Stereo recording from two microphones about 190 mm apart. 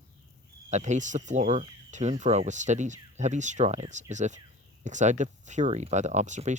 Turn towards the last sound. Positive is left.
turn(degrees=-40)  # may be behind; listen again after turning